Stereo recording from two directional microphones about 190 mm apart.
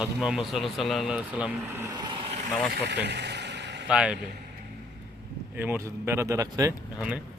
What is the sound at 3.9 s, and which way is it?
Speech, 5° right (ahead or behind).